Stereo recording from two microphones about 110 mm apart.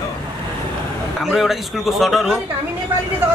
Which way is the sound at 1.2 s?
Centre (ahead or behind).